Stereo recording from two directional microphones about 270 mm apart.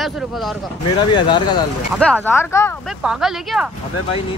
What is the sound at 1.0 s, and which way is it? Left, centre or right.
Speech, centre.